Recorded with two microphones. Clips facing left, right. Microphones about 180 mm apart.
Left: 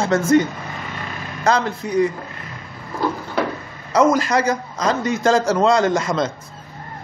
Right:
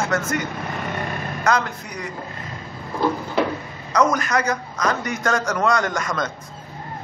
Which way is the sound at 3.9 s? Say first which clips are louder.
Left 4 dB; 30° left (ahead or behind).